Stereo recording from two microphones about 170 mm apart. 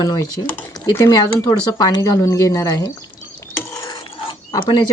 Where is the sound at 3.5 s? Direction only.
15° left (ahead or behind).